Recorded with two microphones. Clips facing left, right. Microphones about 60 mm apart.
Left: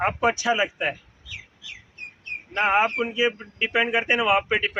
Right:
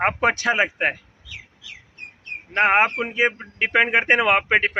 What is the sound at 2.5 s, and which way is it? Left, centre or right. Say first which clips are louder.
Speech: right 3 dB; right.